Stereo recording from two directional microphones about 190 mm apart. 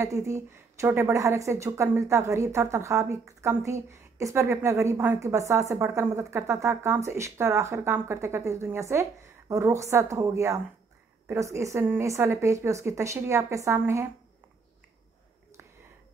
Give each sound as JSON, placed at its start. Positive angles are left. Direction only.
{"t": 0.0, "sound": "a woman's voice", "side_deg": -15}